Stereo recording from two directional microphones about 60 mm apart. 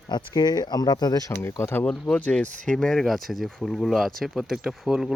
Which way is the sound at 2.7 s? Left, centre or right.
Centre.